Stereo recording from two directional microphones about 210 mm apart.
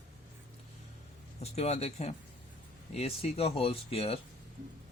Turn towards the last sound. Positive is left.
turn(degrees=30)  # may be behind; listen again after turning